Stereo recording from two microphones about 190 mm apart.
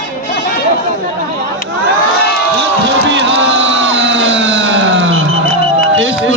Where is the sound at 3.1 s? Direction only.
70° right (ahead or behind).